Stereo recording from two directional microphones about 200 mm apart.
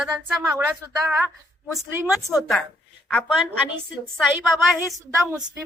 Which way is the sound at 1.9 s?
10° right (ahead or behind).